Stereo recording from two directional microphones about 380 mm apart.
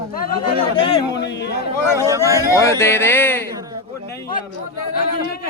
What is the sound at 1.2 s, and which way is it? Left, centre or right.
Speech, left.